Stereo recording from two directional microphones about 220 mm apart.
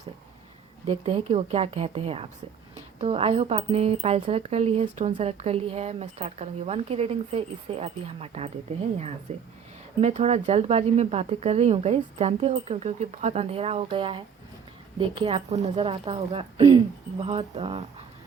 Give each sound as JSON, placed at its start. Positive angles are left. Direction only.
{"t": 0.9, "sound": "speech", "side_deg": -25}